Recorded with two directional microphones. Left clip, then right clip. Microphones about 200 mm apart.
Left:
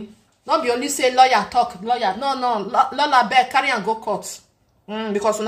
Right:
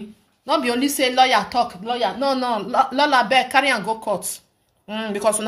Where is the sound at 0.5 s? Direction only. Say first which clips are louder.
Left 1 dB; 40° right (ahead or behind).